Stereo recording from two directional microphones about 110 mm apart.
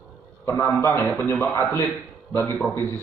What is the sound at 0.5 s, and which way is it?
A man's voice, 25° left (ahead or behind).